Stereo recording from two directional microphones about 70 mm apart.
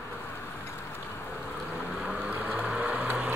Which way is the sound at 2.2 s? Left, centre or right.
Centre.